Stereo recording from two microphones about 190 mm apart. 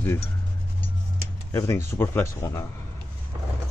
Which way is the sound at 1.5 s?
15° left (ahead or behind).